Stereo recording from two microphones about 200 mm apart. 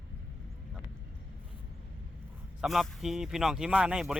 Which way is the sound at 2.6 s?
Centre (ahead or behind).